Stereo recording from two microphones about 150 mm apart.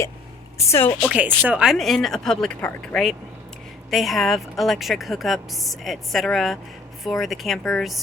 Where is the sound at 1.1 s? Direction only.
10° right (ahead or behind).